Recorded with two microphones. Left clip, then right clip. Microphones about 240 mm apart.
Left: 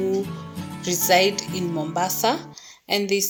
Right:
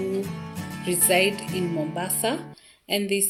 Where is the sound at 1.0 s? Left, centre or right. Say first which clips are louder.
Left 4 dB; centre.